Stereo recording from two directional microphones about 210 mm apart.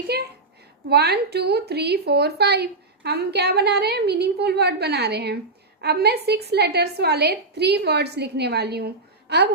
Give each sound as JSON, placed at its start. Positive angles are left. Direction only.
{"t": 0.1, "sound": "a woman's voice", "side_deg": -50}